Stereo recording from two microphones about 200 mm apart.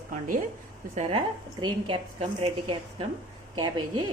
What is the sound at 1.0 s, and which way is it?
A woman's voice, 25° right (ahead or behind).